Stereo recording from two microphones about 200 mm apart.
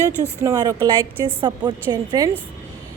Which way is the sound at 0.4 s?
15° right (ahead or behind).